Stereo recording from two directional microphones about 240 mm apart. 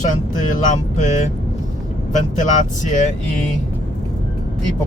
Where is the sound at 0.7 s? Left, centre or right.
Left.